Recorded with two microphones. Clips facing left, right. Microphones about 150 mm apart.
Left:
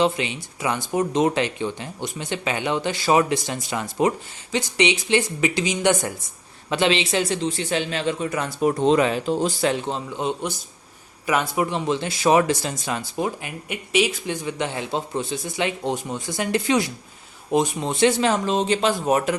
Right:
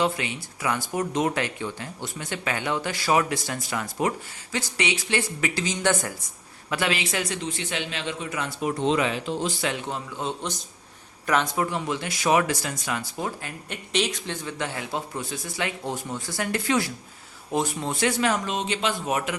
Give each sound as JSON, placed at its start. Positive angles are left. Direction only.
{"t": 0.0, "sound": "speech", "side_deg": 20}
{"t": 9.9, "sound": "speech", "side_deg": 20}